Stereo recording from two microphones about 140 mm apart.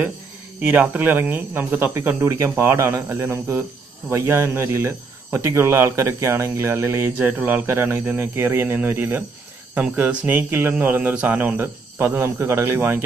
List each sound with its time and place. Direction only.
0.6 s speech: 15° right (ahead or behind)